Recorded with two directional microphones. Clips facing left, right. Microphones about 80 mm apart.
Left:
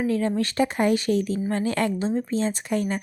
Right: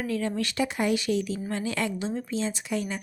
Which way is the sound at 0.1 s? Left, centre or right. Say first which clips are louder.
Left 5 dB; left.